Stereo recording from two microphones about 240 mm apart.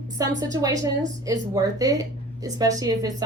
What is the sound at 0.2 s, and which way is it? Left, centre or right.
Speech, centre.